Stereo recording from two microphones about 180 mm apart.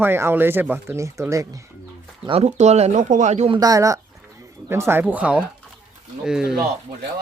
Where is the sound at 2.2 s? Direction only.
35° right (ahead or behind).